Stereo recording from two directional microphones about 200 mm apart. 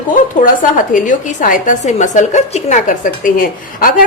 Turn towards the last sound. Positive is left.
turn(degrees=45)  # may be behind; listen again after turning